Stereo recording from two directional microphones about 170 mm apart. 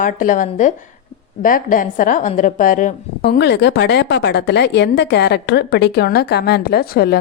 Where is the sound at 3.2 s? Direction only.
80° left.